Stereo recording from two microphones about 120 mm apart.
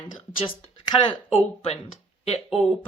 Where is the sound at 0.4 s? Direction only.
45° left (ahead or behind).